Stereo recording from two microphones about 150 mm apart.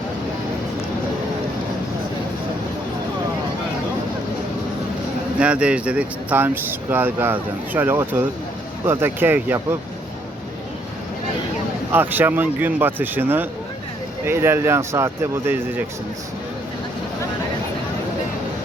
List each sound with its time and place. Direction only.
5.4 s speech: 5° right (ahead or behind)
11.9 s speech: 15° right (ahead or behind)